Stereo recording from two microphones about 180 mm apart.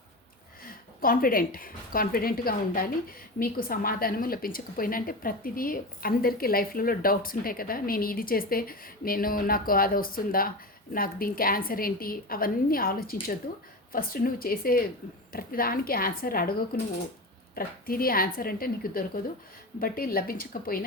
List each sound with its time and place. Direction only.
0.6 s a woman's voice: 55° left (ahead or behind)